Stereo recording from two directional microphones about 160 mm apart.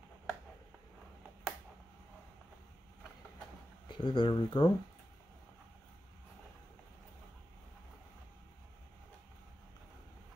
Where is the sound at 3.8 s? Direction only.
30° left (ahead or behind).